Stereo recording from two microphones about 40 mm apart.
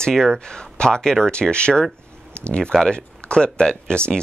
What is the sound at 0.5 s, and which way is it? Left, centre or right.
Speech, left.